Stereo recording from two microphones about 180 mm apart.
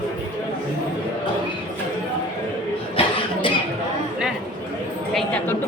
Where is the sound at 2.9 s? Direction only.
25° left (ahead or behind).